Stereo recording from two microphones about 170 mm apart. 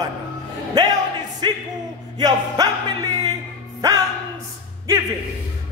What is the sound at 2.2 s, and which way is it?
Music, 25° right (ahead or behind).